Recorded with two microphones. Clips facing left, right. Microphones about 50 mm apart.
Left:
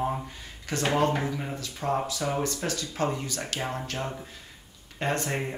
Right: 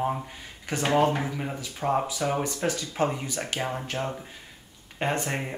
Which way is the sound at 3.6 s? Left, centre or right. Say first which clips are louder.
Right 2 dB; centre.